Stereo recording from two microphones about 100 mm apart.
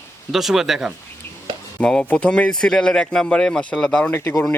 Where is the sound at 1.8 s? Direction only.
10° left (ahead or behind).